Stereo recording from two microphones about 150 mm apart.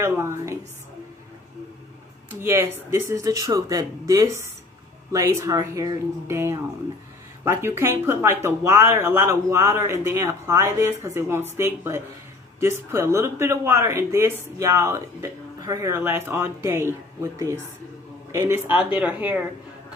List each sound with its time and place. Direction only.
0.0 s speech: 20° right (ahead or behind)
2.4 s speech: 15° right (ahead or behind)